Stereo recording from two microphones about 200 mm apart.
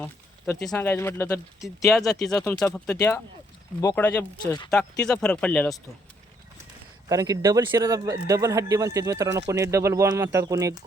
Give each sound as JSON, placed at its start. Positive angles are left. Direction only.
{"t": 0.0, "sound": "speech", "side_deg": 10}
{"t": 1.6, "sound": "speech", "side_deg": 0}
{"t": 7.1, "sound": "speech", "side_deg": -15}